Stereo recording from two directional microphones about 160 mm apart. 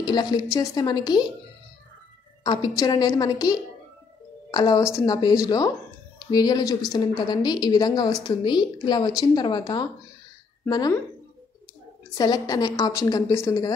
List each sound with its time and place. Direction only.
0.0 s a woman's voice: 25° left (ahead or behind)
2.4 s a woman's voice: 25° left (ahead or behind)
12.2 s a woman's voice: 25° left (ahead or behind)